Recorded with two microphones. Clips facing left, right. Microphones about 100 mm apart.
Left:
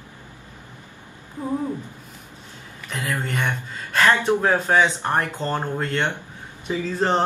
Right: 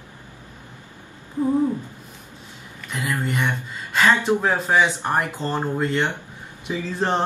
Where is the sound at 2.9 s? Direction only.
15° right (ahead or behind).